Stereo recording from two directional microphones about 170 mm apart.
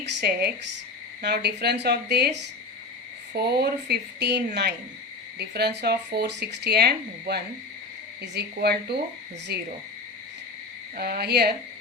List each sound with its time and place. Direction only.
0.0 s speech: 85° right
8.2 s speech: 85° right
10.9 s speech: 65° right (ahead or behind)